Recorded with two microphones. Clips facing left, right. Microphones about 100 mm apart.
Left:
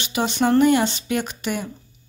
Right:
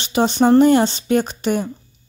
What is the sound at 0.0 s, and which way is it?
Speech, 30° right (ahead or behind).